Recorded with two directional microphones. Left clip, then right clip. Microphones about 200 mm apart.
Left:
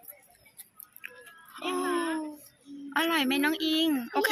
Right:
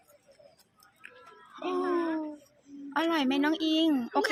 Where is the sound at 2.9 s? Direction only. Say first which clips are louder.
Left 1 dB; 15° right (ahead or behind).